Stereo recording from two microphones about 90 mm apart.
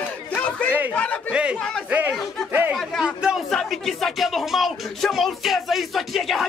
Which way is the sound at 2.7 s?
5° right (ahead or behind).